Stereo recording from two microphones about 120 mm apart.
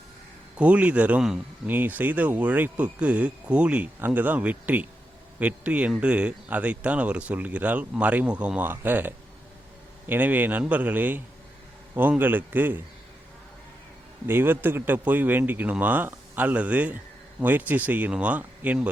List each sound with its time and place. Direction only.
0.6 s speech: 10° right (ahead or behind)
14.3 s speech: 20° right (ahead or behind)